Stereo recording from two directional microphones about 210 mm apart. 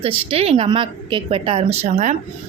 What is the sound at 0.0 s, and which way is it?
A woman's voice, 25° right (ahead or behind).